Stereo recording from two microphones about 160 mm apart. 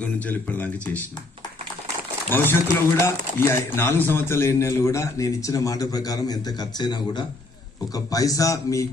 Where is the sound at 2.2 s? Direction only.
15° left (ahead or behind).